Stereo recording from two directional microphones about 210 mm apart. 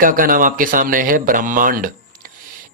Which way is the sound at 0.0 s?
40° right (ahead or behind).